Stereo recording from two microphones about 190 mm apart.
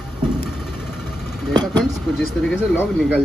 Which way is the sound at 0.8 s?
Centre (ahead or behind).